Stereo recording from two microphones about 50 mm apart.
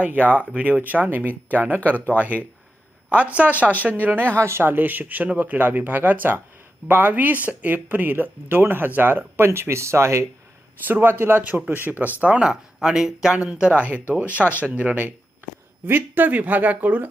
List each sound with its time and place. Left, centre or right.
0.0 s speech: right
4.0 s speech: right
4.4 s speech: right
4.6 s speech: right
10.8 s speech: right
12.4 s speech: centre; by 17.1 s right